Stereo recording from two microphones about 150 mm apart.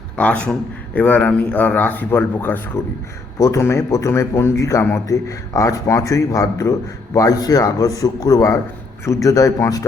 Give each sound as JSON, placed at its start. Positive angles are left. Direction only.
{"t": 0.2, "sound": "a man's voice", "side_deg": 10}